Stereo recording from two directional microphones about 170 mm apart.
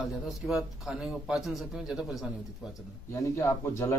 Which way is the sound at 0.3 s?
Centre (ahead or behind).